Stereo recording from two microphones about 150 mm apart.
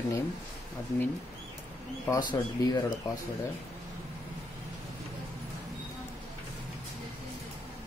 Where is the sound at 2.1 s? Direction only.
25° left (ahead or behind).